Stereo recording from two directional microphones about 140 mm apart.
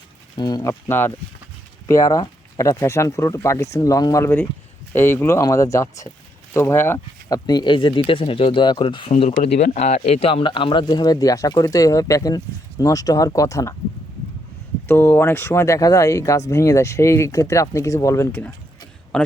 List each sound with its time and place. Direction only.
0.3 s speech: 30° left (ahead or behind)
14.8 s a man's voice: 15° left (ahead or behind)